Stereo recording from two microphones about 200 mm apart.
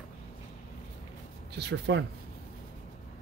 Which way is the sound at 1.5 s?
60° right (ahead or behind).